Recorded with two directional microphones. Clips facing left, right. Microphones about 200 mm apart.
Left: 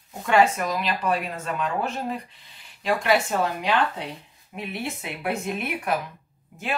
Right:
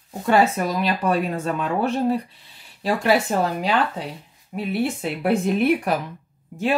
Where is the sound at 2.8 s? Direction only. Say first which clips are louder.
Right 3 dB; 35° right (ahead or behind).